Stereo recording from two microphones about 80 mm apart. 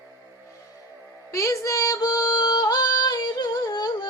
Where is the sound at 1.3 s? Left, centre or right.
Left.